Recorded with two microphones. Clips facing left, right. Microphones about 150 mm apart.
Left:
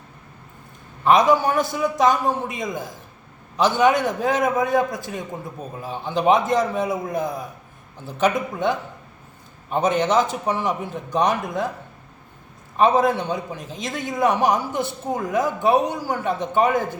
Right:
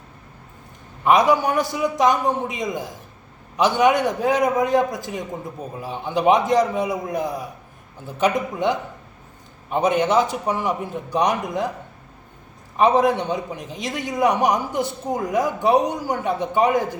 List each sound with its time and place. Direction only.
1.0 s a man's voice: 10° right (ahead or behind)
12.7 s a man's voice: 15° right (ahead or behind)